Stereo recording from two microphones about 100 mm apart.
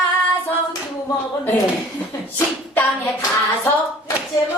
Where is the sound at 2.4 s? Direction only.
20° left (ahead or behind).